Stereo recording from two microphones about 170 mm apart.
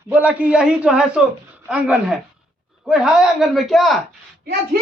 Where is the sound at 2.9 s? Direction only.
5° right (ahead or behind).